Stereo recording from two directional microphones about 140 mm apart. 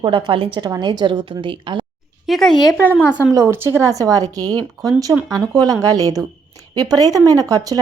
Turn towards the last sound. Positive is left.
turn(degrees=-25)  # may be behind; listen again after turning